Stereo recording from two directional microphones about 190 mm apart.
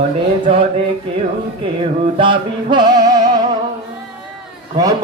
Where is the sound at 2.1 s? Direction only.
25° right (ahead or behind).